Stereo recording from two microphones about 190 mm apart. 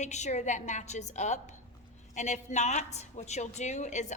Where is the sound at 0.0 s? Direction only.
40° left (ahead or behind).